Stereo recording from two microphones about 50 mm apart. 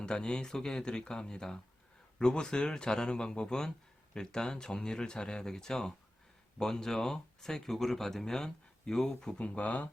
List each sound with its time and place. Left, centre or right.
0.0 s speech: centre
9.4 s speech: left